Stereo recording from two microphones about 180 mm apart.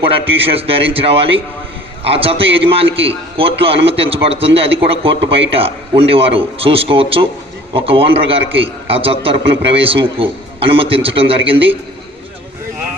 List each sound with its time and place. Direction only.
0.1 s a man's voice: 30° right (ahead or behind)